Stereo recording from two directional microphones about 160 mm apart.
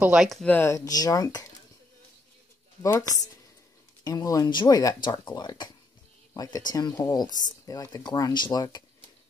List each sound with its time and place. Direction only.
0.0 s speech: 5° right (ahead or behind); by 1.5 s 20° left (ahead or behind)
2.8 s speech: 20° left (ahead or behind)